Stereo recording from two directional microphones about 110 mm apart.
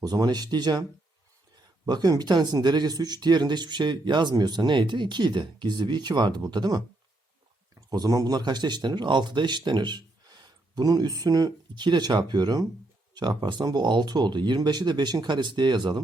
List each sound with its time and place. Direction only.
0.0 s speech: 35° right (ahead or behind)
7.9 s speech: 35° right (ahead or behind)